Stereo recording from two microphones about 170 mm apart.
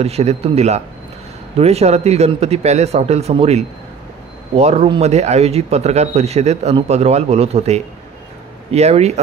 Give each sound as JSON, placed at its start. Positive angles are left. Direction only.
{"t": 0.0, "sound": "a man's voice", "side_deg": -40}